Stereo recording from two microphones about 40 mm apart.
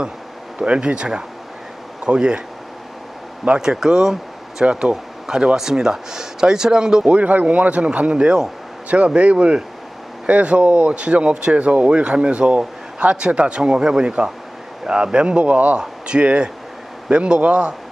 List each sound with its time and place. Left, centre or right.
0.6 s speech: right
3.6 s speech: centre
7.1 s speech: right
8.1 s speech: centre
9.0 s speech: right
15.8 s speech: right